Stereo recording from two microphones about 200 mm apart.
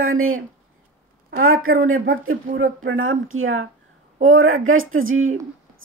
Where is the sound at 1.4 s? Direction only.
90° right.